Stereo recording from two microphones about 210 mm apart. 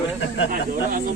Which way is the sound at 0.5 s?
40° right (ahead or behind).